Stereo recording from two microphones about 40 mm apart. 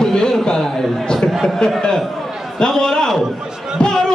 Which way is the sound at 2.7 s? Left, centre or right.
Centre.